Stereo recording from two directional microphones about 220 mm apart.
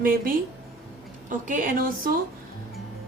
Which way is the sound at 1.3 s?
40° right (ahead or behind).